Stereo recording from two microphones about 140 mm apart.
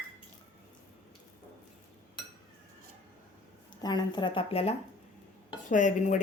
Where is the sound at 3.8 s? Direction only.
30° left (ahead or behind).